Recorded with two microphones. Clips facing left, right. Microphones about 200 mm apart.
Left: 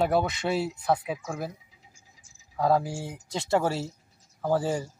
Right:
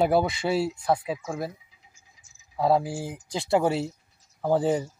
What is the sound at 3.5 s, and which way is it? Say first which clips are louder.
Speech: right 3 dB; 15° right (ahead or behind).